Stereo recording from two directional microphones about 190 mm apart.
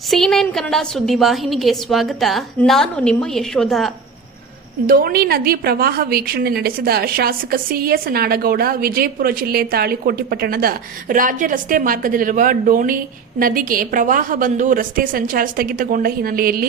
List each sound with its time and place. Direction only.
0.1 s a woman's voice: centre (ahead or behind)
4.9 s a woman's voice: 50° right (ahead or behind)